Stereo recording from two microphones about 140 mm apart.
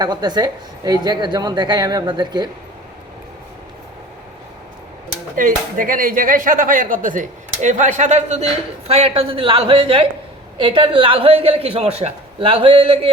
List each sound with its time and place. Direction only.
0.0 s a woman's voice: 30° right (ahead or behind)
5.4 s speech: 75° right (ahead or behind); by 8.4 s 55° right (ahead or behind)
8.9 s a woman's voice: 45° right (ahead or behind)